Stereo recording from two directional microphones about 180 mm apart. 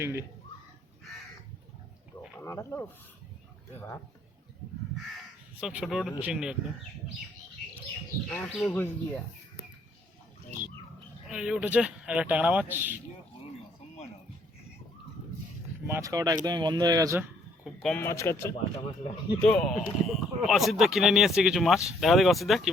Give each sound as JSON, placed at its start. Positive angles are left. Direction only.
{"t": 0.0, "sound": "speech", "side_deg": -15}
{"t": 2.4, "sound": "speech", "side_deg": 15}
{"t": 5.1, "sound": "speech", "side_deg": -5}
{"t": 8.3, "sound": "speech", "side_deg": 10}
{"t": 11.3, "sound": "speech", "side_deg": -5}
{"t": 15.9, "sound": "speech", "side_deg": -20}
{"t": 17.8, "sound": "speech", "side_deg": 10}